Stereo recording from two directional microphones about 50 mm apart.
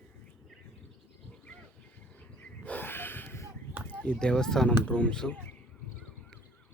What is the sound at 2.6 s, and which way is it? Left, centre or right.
Snort, left.